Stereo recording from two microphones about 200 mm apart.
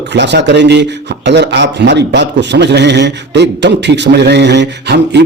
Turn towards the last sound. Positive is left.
turn(degrees=-60)  # may be behind; listen again after turning